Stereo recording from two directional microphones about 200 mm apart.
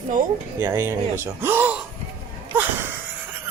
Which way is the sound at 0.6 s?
10° right (ahead or behind).